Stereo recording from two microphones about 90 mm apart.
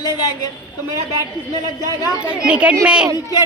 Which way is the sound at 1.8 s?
45° left (ahead or behind).